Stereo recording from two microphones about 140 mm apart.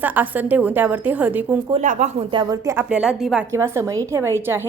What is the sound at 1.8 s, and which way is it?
Speech, 60° right (ahead or behind).